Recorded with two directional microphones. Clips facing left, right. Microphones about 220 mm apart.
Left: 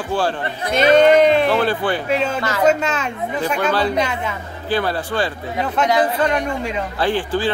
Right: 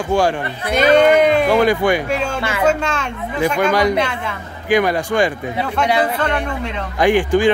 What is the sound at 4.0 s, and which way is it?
Speech, 5° left (ahead or behind).